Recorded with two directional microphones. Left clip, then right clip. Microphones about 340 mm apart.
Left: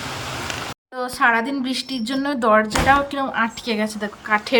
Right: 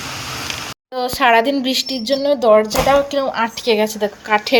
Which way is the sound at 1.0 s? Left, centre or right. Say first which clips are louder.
Right 5 dB; centre.